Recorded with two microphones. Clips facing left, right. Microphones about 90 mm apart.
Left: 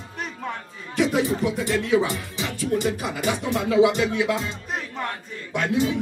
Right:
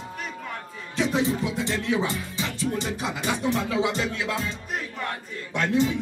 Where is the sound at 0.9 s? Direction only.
25° right (ahead or behind).